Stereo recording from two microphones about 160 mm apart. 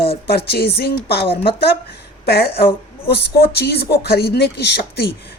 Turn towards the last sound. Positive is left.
turn(degrees=85)